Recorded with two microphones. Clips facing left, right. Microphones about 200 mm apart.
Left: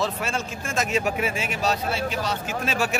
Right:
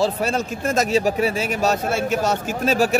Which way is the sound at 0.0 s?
40° right (ahead or behind).